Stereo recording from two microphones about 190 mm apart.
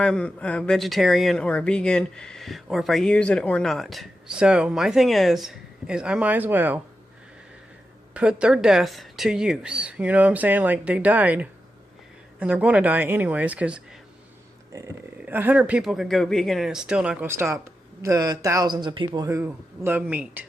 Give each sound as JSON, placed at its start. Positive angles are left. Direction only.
{"t": 0.0, "sound": "speech", "side_deg": 5}
{"t": 8.1, "sound": "a man's voice", "side_deg": -5}